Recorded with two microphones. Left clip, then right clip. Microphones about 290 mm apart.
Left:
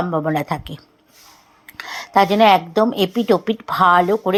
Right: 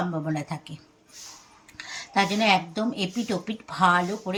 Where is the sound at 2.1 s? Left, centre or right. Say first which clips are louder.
Left 9 dB; left.